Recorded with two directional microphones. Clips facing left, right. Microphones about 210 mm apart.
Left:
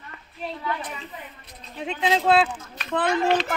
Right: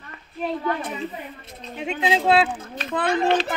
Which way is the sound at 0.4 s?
50° right (ahead or behind).